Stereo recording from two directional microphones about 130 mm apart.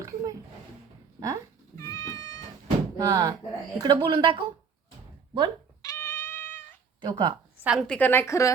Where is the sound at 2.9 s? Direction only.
30° right (ahead or behind).